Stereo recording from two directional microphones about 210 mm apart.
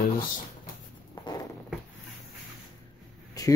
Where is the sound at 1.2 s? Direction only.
20° left (ahead or behind).